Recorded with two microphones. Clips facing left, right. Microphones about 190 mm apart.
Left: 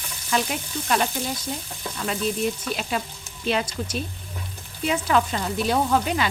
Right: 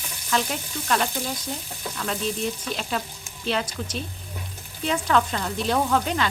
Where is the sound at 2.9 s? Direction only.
10° left (ahead or behind).